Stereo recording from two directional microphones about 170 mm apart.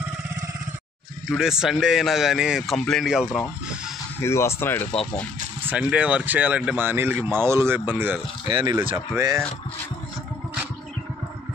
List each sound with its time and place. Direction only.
1.3 s a man's voice: 5° right (ahead or behind)
4.2 s speech: 15° left (ahead or behind)
5.6 s speech: 10° right (ahead or behind)
8.5 s speech: 25° right (ahead or behind)